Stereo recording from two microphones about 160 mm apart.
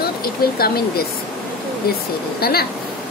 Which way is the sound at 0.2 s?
75° left (ahead or behind).